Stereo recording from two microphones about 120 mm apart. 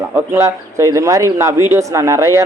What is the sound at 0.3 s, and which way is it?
A man's voice, 25° right (ahead or behind).